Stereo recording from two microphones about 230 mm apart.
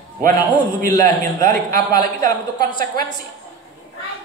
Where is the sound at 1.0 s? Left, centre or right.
Right.